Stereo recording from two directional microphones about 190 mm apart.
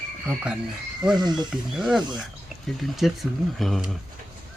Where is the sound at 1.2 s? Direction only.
20° right (ahead or behind).